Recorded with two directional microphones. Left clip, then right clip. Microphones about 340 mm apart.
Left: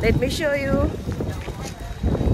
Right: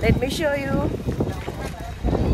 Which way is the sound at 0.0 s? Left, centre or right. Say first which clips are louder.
Left 1 dB; centre.